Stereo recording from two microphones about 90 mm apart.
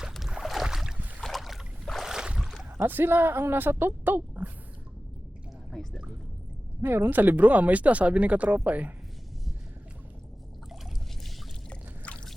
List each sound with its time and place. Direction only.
0.1 s boat: 5° right (ahead or behind)
0.9 s boat: 15° right (ahead or behind)
1.2 s boat: centre (ahead or behind)
2.8 s speech: 25° right (ahead or behind)
5.7 s speech: 5° left (ahead or behind)
6.8 s speech: 25° right (ahead or behind)
11.7 s a sound: 10° left (ahead or behind)